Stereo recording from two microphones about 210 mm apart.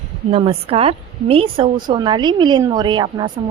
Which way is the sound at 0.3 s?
25° right (ahead or behind).